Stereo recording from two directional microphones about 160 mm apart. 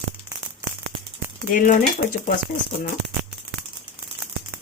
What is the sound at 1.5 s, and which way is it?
Speech, 50° left (ahead or behind).